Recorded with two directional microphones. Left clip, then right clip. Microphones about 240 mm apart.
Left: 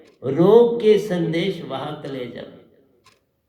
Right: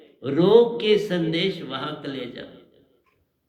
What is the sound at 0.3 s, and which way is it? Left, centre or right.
A man's voice, right.